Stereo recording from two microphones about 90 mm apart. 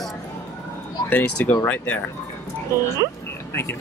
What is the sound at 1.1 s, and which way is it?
Speech, 15° left (ahead or behind).